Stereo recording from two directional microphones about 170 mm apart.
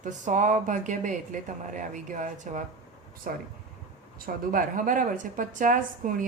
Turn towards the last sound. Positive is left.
turn(degrees=-55)  # may be behind; listen again after turning